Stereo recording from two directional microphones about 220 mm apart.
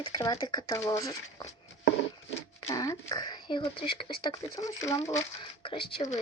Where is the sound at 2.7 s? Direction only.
15° left (ahead or behind).